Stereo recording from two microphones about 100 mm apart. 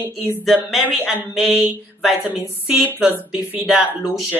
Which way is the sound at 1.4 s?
20° right (ahead or behind).